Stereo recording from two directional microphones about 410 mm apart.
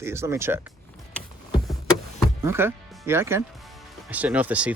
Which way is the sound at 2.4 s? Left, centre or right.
Centre.